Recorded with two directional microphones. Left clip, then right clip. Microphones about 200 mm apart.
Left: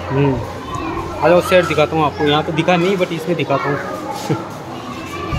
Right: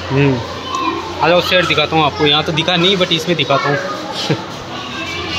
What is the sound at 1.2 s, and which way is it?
Speech, centre (ahead or behind).